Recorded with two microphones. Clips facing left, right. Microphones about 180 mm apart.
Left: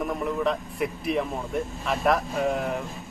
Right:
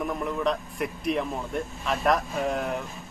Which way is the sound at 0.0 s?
Centre (ahead or behind).